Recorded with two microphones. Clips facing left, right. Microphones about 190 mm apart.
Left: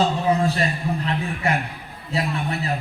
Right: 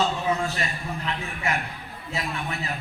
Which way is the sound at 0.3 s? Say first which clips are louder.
Left 6 dB; 35° left (ahead or behind).